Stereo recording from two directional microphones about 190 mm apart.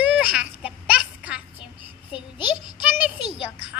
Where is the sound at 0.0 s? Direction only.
5° right (ahead or behind).